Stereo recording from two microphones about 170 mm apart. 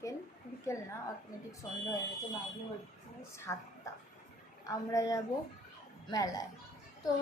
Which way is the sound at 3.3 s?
15° left (ahead or behind).